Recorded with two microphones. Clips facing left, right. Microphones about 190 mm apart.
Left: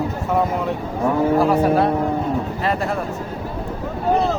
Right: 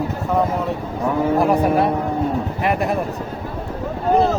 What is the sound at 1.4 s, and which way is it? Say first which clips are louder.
Speech: right 1 dB; 15° right (ahead or behind).